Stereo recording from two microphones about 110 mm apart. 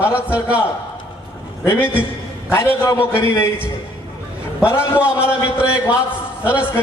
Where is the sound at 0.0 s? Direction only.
20° left (ahead or behind).